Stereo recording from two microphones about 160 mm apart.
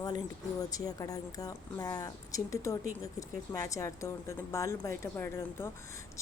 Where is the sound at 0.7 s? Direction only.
25° left (ahead or behind).